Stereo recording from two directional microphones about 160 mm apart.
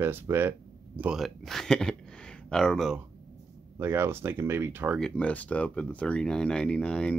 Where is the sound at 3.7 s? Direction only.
15° right (ahead or behind).